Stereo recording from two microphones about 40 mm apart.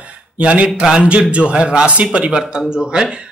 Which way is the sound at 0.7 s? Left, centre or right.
Right.